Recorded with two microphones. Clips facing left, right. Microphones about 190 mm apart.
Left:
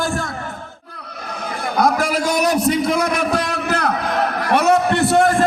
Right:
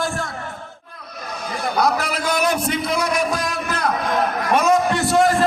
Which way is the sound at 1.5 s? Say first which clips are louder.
Left 2 dB; 50° left (ahead or behind).